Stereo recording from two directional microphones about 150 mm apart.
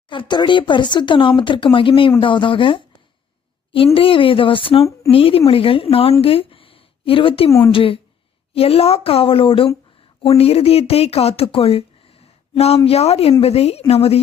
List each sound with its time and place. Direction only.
0.1 s speech: 30° left (ahead or behind)
3.9 s speech: 35° left (ahead or behind)
4.8 s speech: 20° left (ahead or behind)
5.1 s speech: 40° left (ahead or behind)
6.2 s a sound: 40° left (ahead or behind)
7.6 s speech: 35° left (ahead or behind)